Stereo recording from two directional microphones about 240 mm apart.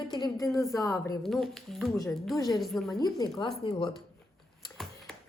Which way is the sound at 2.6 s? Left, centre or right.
Centre.